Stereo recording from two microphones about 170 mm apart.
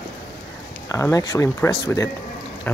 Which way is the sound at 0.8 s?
20° left (ahead or behind).